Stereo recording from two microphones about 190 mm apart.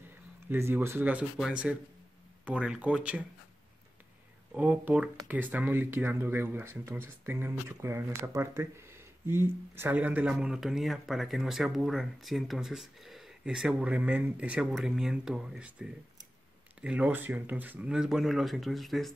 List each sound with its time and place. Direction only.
0.5 s speech: 10° right (ahead or behind)
4.6 s speech: 5° right (ahead or behind)